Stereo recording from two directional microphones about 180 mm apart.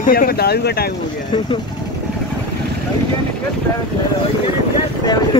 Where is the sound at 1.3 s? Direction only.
30° left (ahead or behind).